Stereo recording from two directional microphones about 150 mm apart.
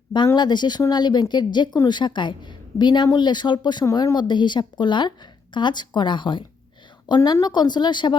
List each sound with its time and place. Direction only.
0.3 s speech: 30° left (ahead or behind)